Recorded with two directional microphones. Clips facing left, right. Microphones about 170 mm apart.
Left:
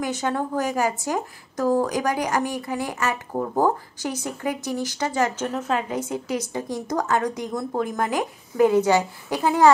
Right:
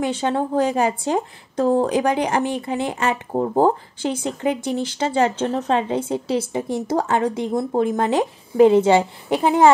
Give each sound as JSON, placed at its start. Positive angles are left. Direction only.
{"t": 0.0, "sound": "a woman's voice", "side_deg": -25}